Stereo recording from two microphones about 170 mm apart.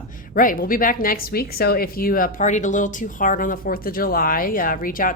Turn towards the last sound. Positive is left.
turn(degrees=55)  # may be behind; listen again after turning